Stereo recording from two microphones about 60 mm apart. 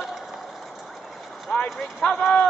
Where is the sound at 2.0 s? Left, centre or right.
Centre.